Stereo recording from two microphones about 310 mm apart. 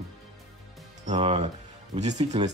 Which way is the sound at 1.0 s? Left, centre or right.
Centre.